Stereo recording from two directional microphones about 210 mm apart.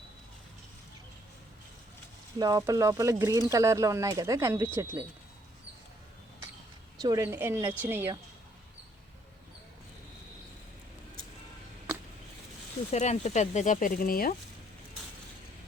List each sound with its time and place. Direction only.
2.4 s speech: 15° right (ahead or behind)
7.0 s speech: 15° right (ahead or behind)
12.9 s speech: 30° left (ahead or behind)